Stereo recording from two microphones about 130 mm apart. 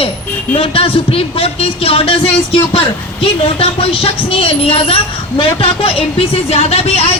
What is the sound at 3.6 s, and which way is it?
A woman's voice, 45° left (ahead or behind).